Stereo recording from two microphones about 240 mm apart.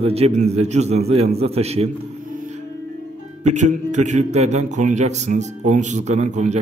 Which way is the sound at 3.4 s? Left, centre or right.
Right.